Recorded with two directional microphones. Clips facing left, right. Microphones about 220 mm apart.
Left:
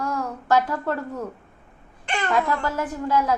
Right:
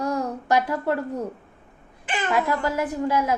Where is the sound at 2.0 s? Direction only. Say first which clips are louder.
Even; 5° right (ahead or behind).